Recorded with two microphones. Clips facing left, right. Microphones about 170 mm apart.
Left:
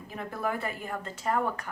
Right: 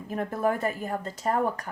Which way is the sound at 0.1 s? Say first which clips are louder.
Right 6 dB; 45° right (ahead or behind).